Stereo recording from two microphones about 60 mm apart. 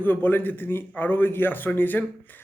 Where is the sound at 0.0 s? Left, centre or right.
Left.